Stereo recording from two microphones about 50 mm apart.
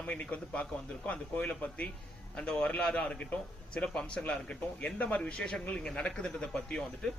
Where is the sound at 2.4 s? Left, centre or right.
Centre.